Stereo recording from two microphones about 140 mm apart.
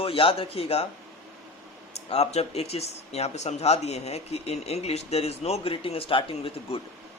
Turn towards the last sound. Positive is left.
turn(degrees=45)  # may be behind; listen again after turning